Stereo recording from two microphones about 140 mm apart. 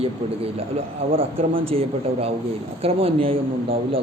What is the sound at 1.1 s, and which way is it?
A man's voice, 40° right (ahead or behind).